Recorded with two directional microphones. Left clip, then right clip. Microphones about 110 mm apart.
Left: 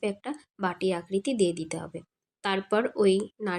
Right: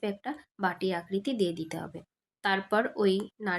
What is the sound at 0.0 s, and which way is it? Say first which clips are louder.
Speech: left 2 dB; 25° left (ahead or behind).